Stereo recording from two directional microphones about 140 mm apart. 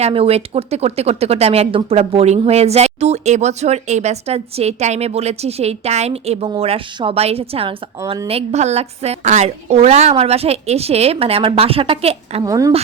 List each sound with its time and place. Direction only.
0.0 s speech: 45° right (ahead or behind)
8.3 s speech: 50° right (ahead or behind)
12.4 s a woman's voice: 25° right (ahead or behind)